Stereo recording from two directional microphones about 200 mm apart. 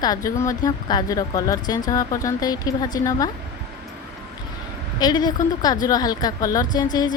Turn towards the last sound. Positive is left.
turn(degrees=20)  # may be behind; listen again after turning